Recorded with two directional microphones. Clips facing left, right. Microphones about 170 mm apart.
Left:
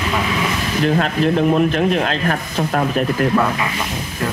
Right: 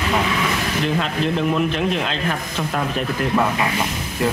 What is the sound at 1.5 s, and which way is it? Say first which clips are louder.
A man's voice: left 5 dB; 45° left (ahead or behind).